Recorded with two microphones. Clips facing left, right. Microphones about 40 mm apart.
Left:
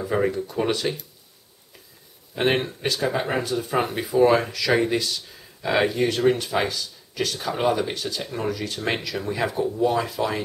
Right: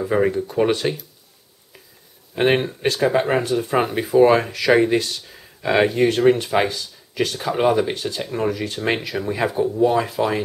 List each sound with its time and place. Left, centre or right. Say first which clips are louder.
0.0 s speech: right 4 dB; centre
2.3 s speech: right 4 dB; centre
4.9 s speech: right 4 dB; right
5.3 s a sound: right 4 dB; centre
5.9 s speech: right 5 dB; right